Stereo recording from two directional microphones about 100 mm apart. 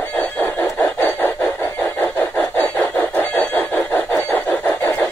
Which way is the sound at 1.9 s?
20° left (ahead or behind).